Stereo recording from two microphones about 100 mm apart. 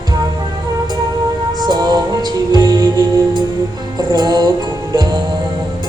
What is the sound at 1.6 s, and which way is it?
Music, 45° right (ahead or behind).